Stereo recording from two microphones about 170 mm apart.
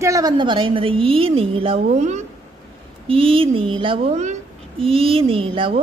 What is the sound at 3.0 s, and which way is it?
A child's voice, 35° right (ahead or behind).